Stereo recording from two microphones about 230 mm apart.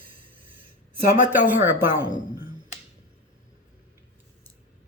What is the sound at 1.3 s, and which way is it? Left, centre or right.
Speech, centre.